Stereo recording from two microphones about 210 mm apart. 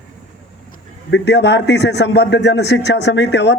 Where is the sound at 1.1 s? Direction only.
55° left (ahead or behind).